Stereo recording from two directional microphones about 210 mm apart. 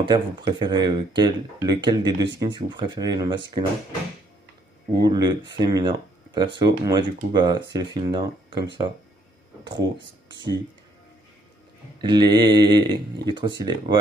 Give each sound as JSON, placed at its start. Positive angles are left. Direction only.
{"t": 0.0, "sound": "speech", "side_deg": -20}
{"t": 5.0, "sound": "speech", "side_deg": -20}
{"t": 10.2, "sound": "speech", "side_deg": -20}
{"t": 12.0, "sound": "speech", "side_deg": -20}